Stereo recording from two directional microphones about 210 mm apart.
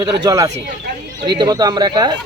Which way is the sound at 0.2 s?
15° right (ahead or behind).